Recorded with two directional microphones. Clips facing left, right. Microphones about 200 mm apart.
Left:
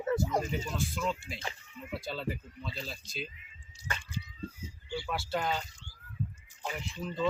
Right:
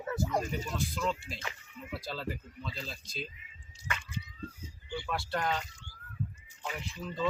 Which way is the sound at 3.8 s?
35° left (ahead or behind).